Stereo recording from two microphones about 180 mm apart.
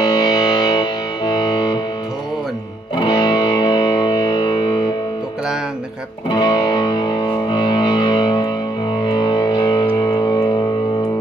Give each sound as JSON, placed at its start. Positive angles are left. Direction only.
{"t": 0.0, "sound": "music", "side_deg": 25}
{"t": 3.0, "sound": "music", "side_deg": 25}
{"t": 6.3, "sound": "music", "side_deg": 25}